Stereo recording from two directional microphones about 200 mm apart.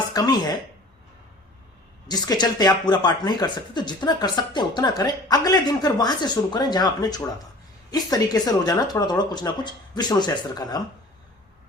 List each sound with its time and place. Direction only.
0.1 s speech: 20° left (ahead or behind)
2.0 s speech: 20° left (ahead or behind)